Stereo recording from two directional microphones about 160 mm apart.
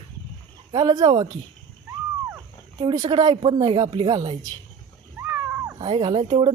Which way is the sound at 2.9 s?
25° right (ahead or behind).